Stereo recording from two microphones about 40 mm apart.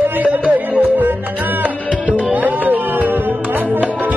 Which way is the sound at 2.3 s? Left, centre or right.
Right.